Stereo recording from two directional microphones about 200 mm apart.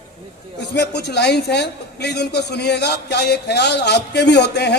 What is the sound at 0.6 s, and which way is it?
A man's voice, 55° left (ahead or behind).